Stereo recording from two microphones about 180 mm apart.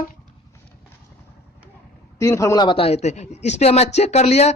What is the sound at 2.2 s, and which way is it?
Speech, 15° left (ahead or behind).